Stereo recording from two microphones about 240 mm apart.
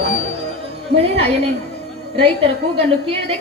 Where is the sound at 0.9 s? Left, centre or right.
Right.